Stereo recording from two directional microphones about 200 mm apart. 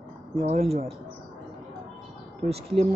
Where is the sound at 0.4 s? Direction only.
35° right (ahead or behind).